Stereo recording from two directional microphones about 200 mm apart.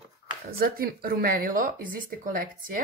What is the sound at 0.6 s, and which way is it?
A woman's voice, 50° right (ahead or behind).